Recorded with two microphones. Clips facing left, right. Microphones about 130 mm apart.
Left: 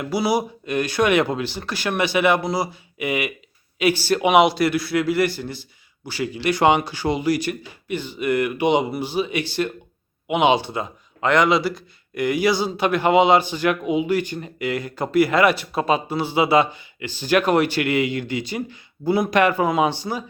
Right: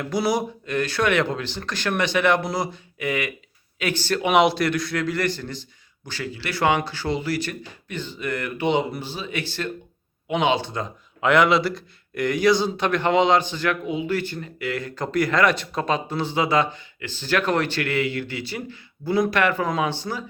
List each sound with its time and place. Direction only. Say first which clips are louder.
0.0 s a man's voice: left 2 dB; 10° left (ahead or behind)
11.2 s a man's voice: even; 5° right (ahead or behind); by 20.2 s 15° left (ahead or behind)